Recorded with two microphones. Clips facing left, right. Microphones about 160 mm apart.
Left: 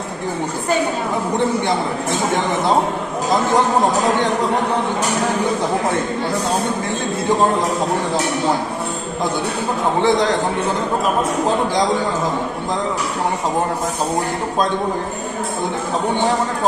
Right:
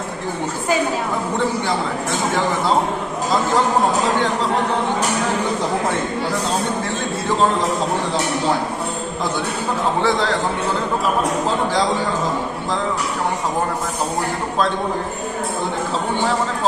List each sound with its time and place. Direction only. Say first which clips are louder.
10.0 s a man's voice: left 5 dB; 20° left (ahead or behind)